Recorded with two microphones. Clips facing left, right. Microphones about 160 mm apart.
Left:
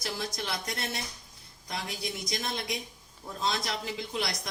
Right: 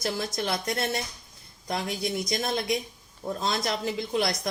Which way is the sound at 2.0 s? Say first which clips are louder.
Right 6 dB; 50° right (ahead or behind).